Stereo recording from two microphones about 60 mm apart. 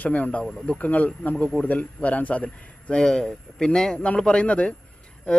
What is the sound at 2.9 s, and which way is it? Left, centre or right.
A man's voice, centre.